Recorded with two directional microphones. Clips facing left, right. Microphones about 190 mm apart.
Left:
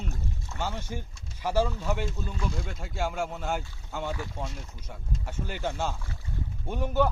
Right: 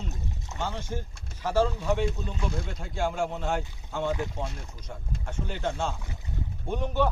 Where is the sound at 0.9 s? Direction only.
5° left (ahead or behind).